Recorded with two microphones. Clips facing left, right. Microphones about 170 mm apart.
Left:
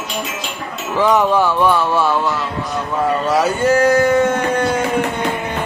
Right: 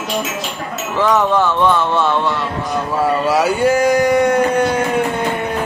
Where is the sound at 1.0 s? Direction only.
10° left (ahead or behind).